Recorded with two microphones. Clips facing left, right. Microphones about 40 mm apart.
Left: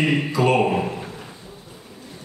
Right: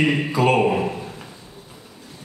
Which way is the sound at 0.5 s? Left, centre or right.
Centre.